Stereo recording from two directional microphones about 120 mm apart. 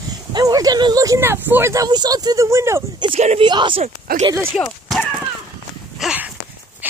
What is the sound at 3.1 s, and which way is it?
Speech, 65° right (ahead or behind).